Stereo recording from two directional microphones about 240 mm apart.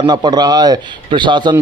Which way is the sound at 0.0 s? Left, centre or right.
Centre.